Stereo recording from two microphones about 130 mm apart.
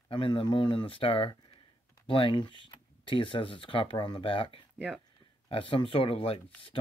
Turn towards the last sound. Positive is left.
turn(degrees=45)  # may be behind; listen again after turning